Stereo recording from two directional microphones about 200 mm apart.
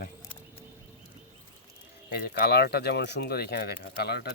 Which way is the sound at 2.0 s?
50° left (ahead or behind).